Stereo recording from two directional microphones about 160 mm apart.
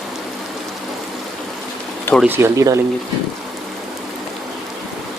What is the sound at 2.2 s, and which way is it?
Speech, 15° right (ahead or behind).